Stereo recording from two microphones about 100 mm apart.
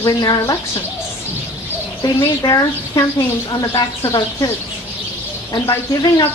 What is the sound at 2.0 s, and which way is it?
Speech, 40° left (ahead or behind).